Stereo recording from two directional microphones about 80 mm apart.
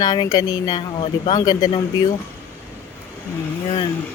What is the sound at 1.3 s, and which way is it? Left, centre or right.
Speech, left.